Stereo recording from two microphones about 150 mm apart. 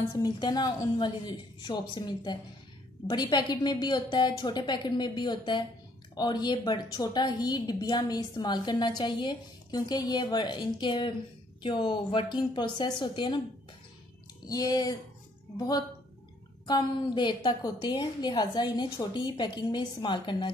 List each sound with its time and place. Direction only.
0.1 s a woman's voice: 30° left (ahead or behind)
14.5 s a woman's voice: 25° left (ahead or behind)